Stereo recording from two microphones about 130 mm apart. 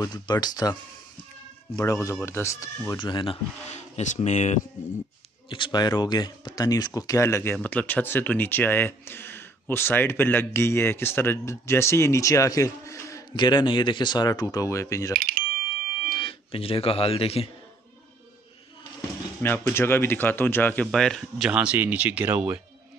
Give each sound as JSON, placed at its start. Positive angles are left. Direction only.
{"t": 0.0, "sound": "speech", "side_deg": 30}
{"t": 1.8, "sound": "speech", "side_deg": 25}
{"t": 2.9, "sound": "speech", "side_deg": 35}
{"t": 3.7, "sound": "speech", "side_deg": 65}
{"t": 5.5, "sound": "speech", "side_deg": 35}
{"t": 13.4, "sound": "speech", "side_deg": 35}
{"t": 15.1, "sound": "doorbell", "side_deg": -90}
{"t": 16.1, "sound": "speech", "side_deg": 40}
{"t": 19.4, "sound": "speech", "side_deg": 20}
{"t": 21.5, "sound": "speech", "side_deg": -10}